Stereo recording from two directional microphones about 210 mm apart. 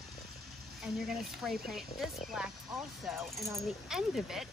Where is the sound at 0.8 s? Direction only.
Centre (ahead or behind).